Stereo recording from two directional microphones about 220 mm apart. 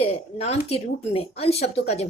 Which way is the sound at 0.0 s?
25° left (ahead or behind).